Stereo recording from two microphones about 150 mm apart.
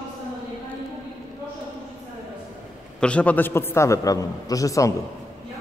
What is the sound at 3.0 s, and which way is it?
A man's voice, 10° left (ahead or behind).